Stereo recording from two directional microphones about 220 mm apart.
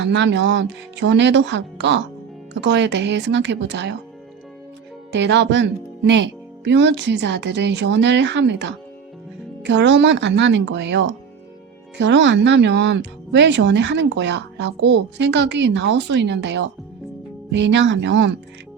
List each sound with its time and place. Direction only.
0.0 s speech: 55° right (ahead or behind)
5.1 s a woman's voice: 55° right (ahead or behind)